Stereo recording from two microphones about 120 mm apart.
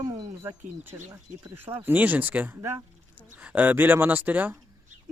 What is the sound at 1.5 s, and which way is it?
Speech, 15° right (ahead or behind).